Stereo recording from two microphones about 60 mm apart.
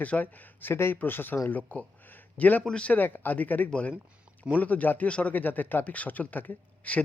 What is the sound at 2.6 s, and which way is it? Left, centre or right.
Speech, centre.